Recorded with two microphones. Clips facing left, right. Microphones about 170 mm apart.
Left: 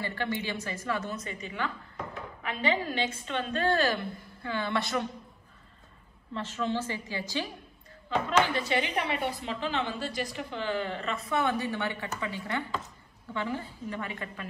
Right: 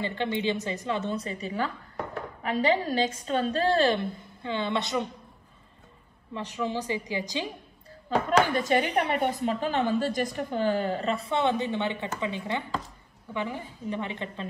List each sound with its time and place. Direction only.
0.0 s a woman's voice: 20° right (ahead or behind)
6.3 s a woman's voice: 15° right (ahead or behind)
8.5 s a woman's voice: 45° right (ahead or behind); by 14.5 s 25° right (ahead or behind)